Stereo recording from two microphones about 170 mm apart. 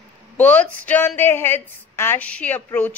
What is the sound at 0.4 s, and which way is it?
A woman's voice, 10° left (ahead or behind).